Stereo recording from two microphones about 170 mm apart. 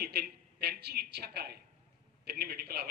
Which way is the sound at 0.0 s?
65° right (ahead or behind).